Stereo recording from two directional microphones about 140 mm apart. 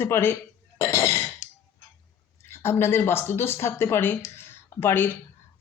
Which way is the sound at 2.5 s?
15° left (ahead or behind).